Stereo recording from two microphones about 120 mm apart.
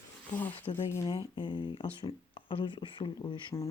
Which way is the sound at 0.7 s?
20° left (ahead or behind).